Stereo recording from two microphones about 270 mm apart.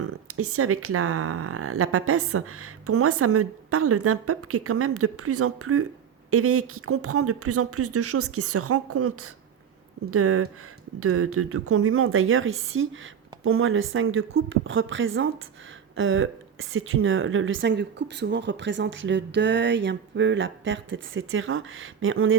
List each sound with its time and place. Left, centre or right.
0.0 s a woman's voice: right